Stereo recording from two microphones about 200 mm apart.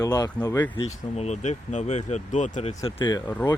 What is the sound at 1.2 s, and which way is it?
Speech, 35° left (ahead or behind).